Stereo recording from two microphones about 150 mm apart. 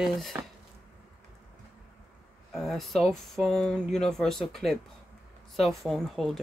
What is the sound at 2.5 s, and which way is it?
Speech, centre (ahead or behind).